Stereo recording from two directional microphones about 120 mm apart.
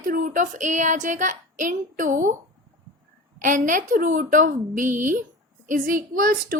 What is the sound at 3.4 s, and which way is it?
A woman's voice, 90° right.